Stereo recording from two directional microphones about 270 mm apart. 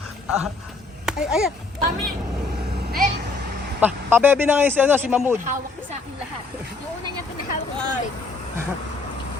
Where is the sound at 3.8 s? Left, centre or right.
Centre.